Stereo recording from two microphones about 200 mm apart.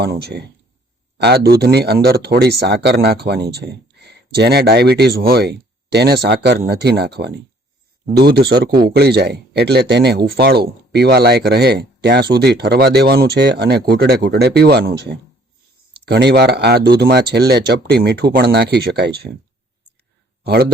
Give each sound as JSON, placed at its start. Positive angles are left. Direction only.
{"t": 0.0, "sound": "speech", "side_deg": -55}
{"t": 20.4, "sound": "speech", "side_deg": -50}